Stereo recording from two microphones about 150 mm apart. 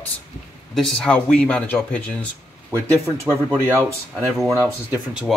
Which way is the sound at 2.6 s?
15° right (ahead or behind).